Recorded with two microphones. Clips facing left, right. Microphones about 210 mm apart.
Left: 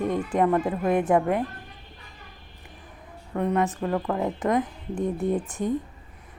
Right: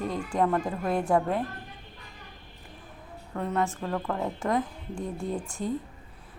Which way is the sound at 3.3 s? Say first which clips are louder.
Left 5 dB; 15° left (ahead or behind).